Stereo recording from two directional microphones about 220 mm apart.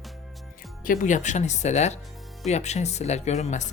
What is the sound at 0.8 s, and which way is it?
Speech, 40° left (ahead or behind).